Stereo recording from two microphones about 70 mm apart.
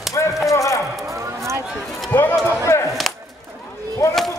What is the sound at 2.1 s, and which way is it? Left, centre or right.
Run, left.